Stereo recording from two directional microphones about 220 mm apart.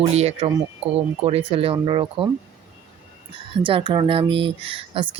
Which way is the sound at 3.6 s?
20° right (ahead or behind).